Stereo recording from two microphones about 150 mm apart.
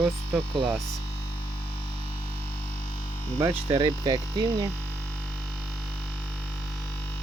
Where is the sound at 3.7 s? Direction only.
30° right (ahead or behind).